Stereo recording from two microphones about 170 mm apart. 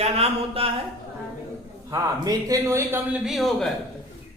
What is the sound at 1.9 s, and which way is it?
A man's voice, 20° right (ahead or behind).